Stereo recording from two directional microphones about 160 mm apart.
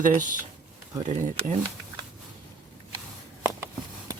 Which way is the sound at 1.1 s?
50° right (ahead or behind).